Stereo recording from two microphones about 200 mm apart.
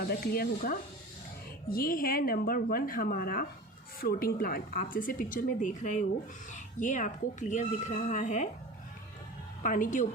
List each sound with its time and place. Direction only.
0.0 s a woman's voice: 50° left (ahead or behind)
9.6 s speech: 40° left (ahead or behind)